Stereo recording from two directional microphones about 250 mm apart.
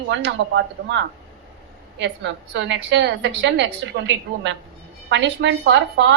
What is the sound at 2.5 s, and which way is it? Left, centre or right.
A woman's voice, right.